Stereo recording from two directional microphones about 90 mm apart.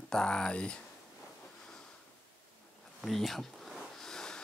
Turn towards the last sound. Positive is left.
turn(degrees=5)  # may be behind; listen again after turning